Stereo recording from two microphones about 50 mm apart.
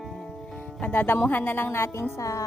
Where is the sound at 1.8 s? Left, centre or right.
Left.